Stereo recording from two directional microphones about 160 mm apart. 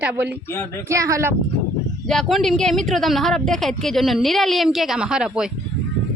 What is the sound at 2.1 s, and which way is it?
Speech, centre (ahead or behind).